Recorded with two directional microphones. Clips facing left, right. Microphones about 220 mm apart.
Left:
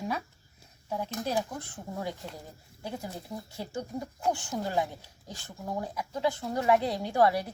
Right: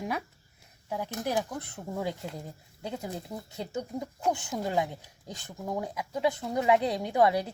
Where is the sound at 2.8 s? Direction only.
20° right (ahead or behind).